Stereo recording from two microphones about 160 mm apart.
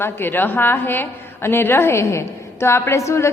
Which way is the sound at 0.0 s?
15° left (ahead or behind).